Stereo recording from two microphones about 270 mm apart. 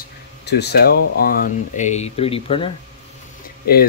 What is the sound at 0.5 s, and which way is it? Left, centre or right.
Speech, left.